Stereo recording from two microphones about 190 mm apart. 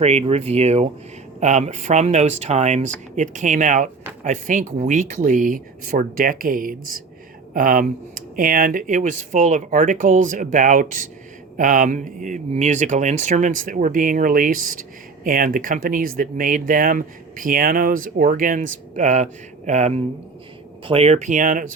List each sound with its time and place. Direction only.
0.0 s speech: 35° right (ahead or behind)